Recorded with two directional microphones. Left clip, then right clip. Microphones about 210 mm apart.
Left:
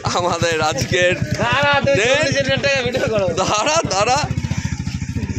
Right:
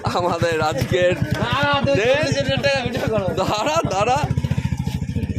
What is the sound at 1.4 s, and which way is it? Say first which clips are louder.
Speech: left 4 dB; 35° left (ahead or behind).